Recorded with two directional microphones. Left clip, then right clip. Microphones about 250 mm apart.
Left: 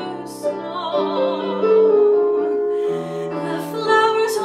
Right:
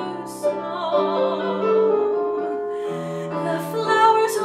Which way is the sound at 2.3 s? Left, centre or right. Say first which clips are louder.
Left 6 dB; right.